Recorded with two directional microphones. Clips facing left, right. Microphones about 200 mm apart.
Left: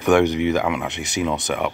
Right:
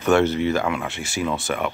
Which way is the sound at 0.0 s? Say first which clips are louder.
Left 2 dB; 15° left (ahead or behind).